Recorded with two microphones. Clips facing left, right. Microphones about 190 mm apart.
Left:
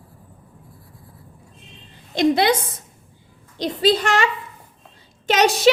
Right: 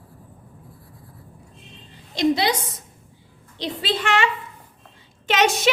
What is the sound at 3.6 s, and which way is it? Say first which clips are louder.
Speech: left 7 dB; 40° left (ahead or behind).